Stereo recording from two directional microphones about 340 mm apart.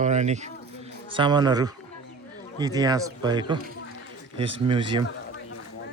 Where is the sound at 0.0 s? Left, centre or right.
Centre.